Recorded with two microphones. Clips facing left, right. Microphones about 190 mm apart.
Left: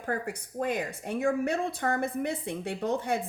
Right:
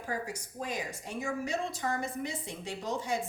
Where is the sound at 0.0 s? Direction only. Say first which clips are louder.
Left 4 dB; 60° left (ahead or behind).